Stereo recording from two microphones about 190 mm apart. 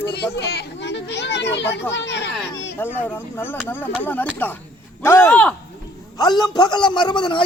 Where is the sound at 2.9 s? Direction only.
10° left (ahead or behind).